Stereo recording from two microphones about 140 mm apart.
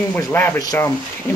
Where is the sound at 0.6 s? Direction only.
25° left (ahead or behind).